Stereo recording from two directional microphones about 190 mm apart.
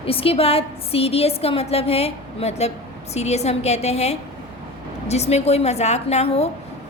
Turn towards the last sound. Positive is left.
turn(degrees=30)  # may be behind; listen again after turning